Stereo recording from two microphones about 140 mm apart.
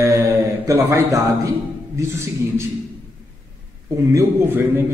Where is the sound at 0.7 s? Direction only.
15° right (ahead or behind).